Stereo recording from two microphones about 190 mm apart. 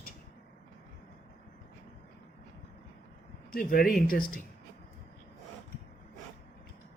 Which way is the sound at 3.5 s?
50° left (ahead or behind).